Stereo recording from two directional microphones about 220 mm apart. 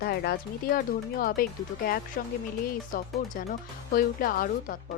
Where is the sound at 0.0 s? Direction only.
45° left (ahead or behind).